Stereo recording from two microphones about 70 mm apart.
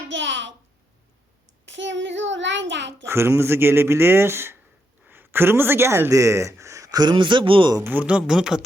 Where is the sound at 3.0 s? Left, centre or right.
Right.